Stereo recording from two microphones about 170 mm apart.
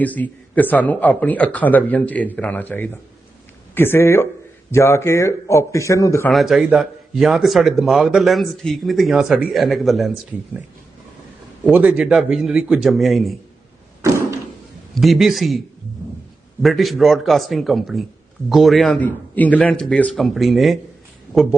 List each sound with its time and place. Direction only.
0.0 s speech: 10° left (ahead or behind)
6.3 s speech: centre (ahead or behind)
11.7 s speech: 5° right (ahead or behind)
14.0 s door: 15° right (ahead or behind)
14.9 s speech: centre (ahead or behind)
16.6 s speech: centre (ahead or behind)